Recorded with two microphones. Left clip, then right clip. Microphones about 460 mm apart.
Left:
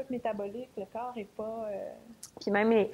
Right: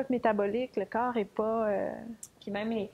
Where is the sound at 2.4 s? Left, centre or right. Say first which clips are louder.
Left 8 dB; left.